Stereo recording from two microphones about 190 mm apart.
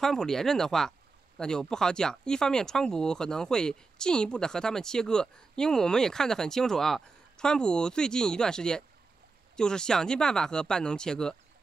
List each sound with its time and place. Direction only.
0.0 s speech: centre (ahead or behind)